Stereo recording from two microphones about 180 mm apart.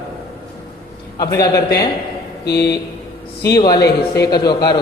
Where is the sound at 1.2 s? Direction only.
20° left (ahead or behind).